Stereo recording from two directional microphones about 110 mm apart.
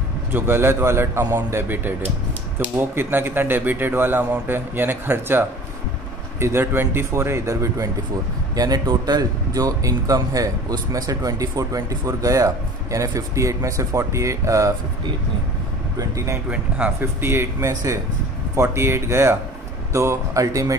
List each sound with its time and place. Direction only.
0.3 s a man's voice: 20° right (ahead or behind)
6.4 s a man's voice: 20° right (ahead or behind)
16.0 s a man's voice: 25° right (ahead or behind)
16.4 s speech: 10° right (ahead or behind)
17.0 s a man's voice: 25° right (ahead or behind)